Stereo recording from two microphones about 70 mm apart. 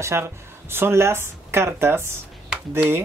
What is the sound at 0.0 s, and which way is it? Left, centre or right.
Speech, right.